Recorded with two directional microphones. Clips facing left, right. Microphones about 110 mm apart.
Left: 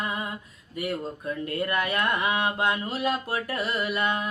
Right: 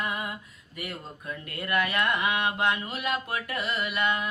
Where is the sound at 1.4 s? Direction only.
30° left (ahead or behind).